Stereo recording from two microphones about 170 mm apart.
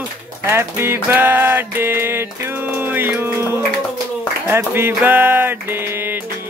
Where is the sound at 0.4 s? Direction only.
15° right (ahead or behind).